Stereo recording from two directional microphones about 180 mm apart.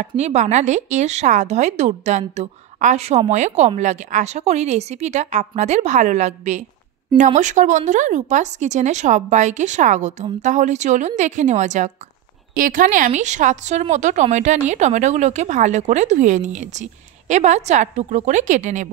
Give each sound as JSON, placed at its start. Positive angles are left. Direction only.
{"t": 0.0, "sound": "speech", "side_deg": -40}